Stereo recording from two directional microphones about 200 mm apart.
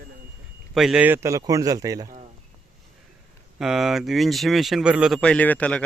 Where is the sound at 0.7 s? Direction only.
Centre (ahead or behind); by 2.0 s 15° right (ahead or behind).